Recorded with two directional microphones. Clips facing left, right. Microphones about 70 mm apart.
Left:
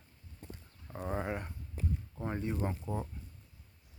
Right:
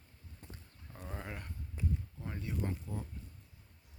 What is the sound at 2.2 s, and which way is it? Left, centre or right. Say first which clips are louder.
Speech: left 5 dB; left.